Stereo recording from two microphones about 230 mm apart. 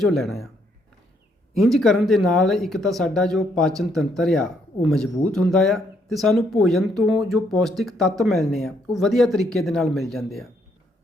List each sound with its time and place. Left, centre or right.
0.0 s speech: centre
1.5 s speech: centre